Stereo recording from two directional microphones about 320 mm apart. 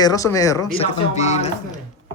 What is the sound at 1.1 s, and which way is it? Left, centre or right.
Speech, left.